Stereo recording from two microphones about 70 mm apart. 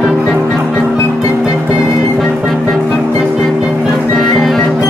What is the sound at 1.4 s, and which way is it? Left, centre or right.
Music, centre.